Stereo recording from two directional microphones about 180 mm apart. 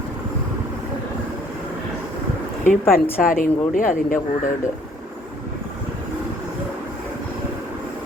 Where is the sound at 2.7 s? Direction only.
55° left (ahead or behind).